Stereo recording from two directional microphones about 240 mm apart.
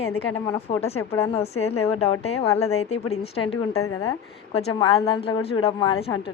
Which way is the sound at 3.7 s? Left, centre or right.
Left.